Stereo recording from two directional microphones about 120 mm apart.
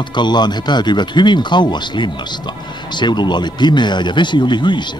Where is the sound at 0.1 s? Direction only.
40° left (ahead or behind).